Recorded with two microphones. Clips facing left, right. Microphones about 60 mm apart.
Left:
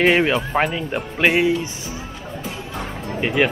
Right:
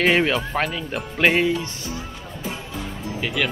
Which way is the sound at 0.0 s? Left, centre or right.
Centre.